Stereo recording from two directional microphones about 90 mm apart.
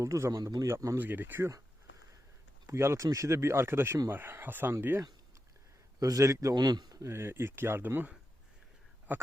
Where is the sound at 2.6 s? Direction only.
30° right (ahead or behind).